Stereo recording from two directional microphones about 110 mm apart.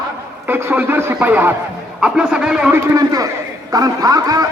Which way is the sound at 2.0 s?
5° right (ahead or behind).